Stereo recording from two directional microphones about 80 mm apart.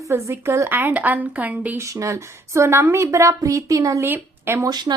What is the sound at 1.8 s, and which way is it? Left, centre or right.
A woman's voice, right.